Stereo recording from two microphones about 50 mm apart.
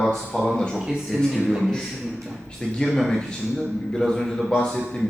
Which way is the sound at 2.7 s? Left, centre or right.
Centre.